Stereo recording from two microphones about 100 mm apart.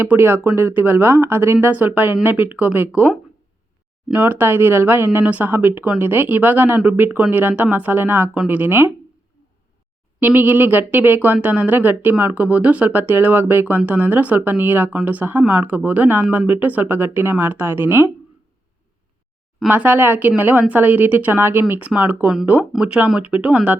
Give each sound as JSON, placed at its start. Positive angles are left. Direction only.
{"t": 0.0, "sound": "a woman's voice", "side_deg": -20}
{"t": 4.1, "sound": "a woman's voice", "side_deg": -20}
{"t": 10.2, "sound": "a woman's voice", "side_deg": -20}
{"t": 19.6, "sound": "a woman's voice", "side_deg": -20}